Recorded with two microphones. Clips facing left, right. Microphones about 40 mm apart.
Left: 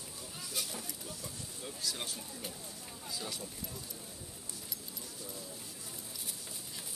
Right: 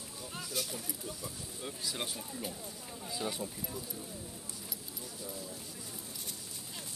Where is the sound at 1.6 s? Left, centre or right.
Centre.